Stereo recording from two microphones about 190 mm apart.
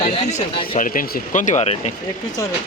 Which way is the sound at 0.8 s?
50° left (ahead or behind).